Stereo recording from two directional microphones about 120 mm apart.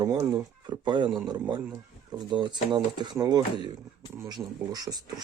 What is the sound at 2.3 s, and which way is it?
Speech, 40° right (ahead or behind).